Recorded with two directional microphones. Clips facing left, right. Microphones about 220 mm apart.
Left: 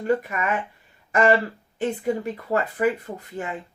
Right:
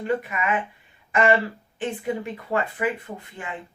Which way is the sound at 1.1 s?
40° left (ahead or behind).